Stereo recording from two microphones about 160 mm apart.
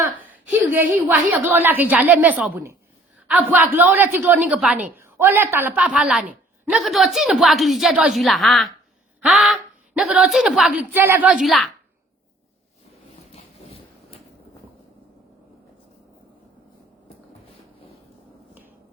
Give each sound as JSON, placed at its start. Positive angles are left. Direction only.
{"t": 0.7, "sound": "a woman's voice", "side_deg": -10}
{"t": 4.9, "sound": "a woman's voice", "side_deg": -15}
{"t": 11.4, "sound": "a woman's voice", "side_deg": 0}
{"t": 13.3, "sound": "vehicle", "side_deg": 40}